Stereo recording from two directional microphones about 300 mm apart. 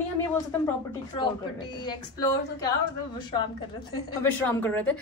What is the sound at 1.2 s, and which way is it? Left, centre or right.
A woman's voice, centre.